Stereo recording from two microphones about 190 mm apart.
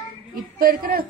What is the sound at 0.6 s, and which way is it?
Speech, 50° right (ahead or behind).